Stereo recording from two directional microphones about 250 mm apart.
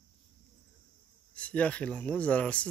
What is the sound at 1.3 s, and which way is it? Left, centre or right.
Speech, centre.